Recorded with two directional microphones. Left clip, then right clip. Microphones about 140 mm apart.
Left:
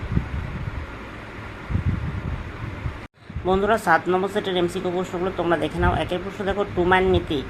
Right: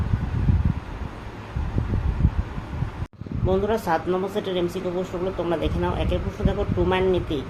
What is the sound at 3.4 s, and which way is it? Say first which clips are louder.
Speech: left 4 dB; 20° left (ahead or behind).